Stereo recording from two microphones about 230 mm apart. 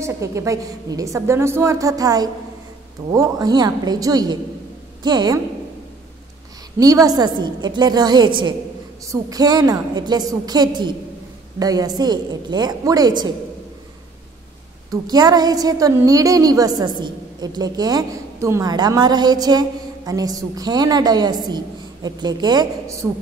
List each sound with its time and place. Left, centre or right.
0.0 s a woman's voice: centre
6.8 s a woman's voice: centre
14.9 s a woman's voice: centre